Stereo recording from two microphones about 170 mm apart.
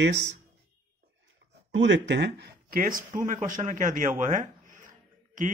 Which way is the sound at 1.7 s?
90° right.